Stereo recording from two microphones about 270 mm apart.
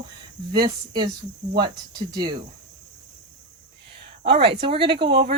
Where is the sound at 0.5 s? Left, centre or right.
Centre.